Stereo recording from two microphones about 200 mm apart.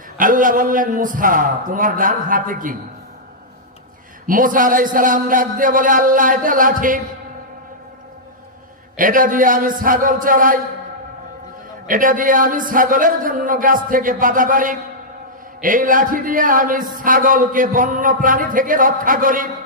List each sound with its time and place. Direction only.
0.2 s a man's voice: 40° right (ahead or behind)
4.3 s a man's voice: 45° right (ahead or behind)
9.0 s a man's voice: 45° right (ahead or behind)
11.9 s a man's voice: 40° right (ahead or behind)